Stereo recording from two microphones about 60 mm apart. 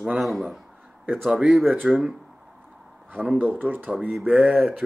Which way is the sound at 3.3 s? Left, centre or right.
Right.